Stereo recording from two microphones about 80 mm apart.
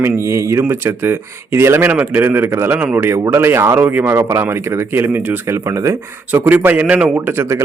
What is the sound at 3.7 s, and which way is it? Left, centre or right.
Speech, right.